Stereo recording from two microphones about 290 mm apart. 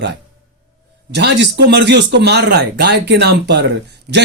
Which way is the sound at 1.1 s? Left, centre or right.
Right.